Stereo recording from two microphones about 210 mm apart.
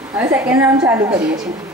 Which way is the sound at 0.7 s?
15° right (ahead or behind).